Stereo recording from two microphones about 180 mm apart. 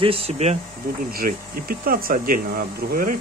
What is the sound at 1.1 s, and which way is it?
Speech, 55° right (ahead or behind).